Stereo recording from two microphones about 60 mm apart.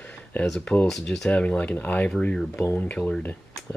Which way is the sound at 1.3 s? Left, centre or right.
Left.